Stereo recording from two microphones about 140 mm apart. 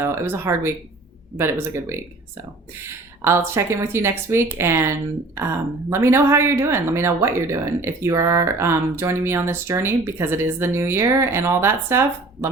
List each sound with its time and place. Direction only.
0.0 s speech: 20° right (ahead or behind)
3.2 s speech: 20° right (ahead or behind)